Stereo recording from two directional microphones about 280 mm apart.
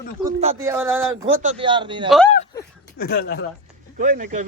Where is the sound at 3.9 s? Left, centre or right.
Right.